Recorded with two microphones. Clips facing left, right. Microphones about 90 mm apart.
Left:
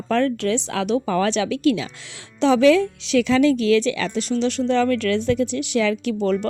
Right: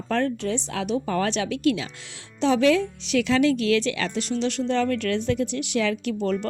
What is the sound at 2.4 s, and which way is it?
Speech, 90° left.